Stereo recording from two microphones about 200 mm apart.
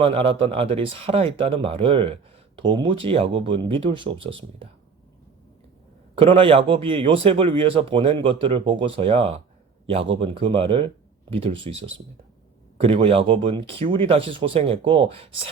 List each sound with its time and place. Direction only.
0.0 s a man's voice: 25° right (ahead or behind)
6.1 s a man's voice: 25° right (ahead or behind)